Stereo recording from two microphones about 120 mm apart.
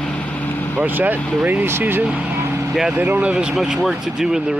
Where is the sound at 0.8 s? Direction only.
15° right (ahead or behind).